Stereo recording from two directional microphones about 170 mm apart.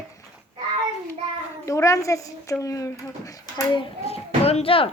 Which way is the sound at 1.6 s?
15° left (ahead or behind).